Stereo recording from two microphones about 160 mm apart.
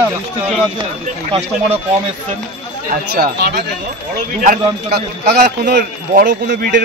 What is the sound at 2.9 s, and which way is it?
Speech, 75° right (ahead or behind).